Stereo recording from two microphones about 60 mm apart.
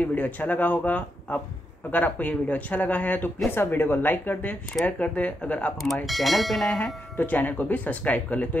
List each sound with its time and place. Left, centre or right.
0.0 s a woman's voice: left
6.0 s speech: centre
6.8 s speech: left